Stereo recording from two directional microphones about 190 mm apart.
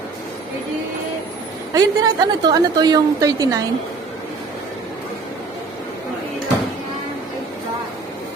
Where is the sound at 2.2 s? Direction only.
20° right (ahead or behind).